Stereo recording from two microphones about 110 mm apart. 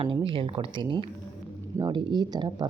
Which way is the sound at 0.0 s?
55° right (ahead or behind).